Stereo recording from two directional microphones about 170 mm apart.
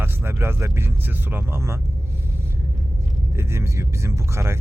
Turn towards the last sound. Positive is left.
turn(degrees=-15)  # may be behind; listen again after turning